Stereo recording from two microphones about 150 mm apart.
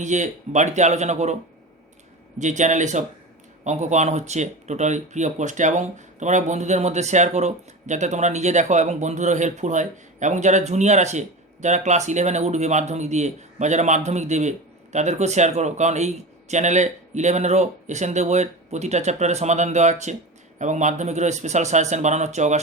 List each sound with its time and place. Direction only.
0.0 s speech: 55° right (ahead or behind)
2.4 s speech: 55° right (ahead or behind)